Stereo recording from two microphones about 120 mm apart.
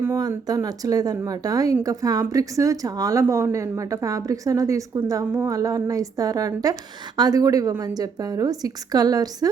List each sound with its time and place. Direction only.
0.2 s a woman's voice: 30° right (ahead or behind)